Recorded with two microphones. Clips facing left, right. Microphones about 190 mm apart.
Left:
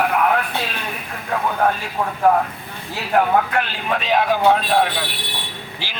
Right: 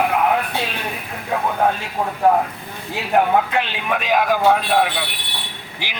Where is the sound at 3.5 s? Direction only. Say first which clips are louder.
Even; 20° right (ahead or behind).